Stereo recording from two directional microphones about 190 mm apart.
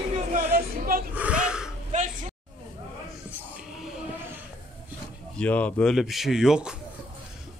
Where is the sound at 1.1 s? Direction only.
5° right (ahead or behind).